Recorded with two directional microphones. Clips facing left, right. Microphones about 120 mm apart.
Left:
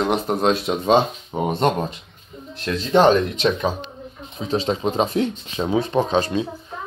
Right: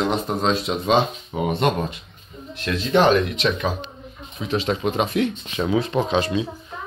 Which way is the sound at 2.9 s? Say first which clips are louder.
Left 2 dB; 30° left (ahead or behind).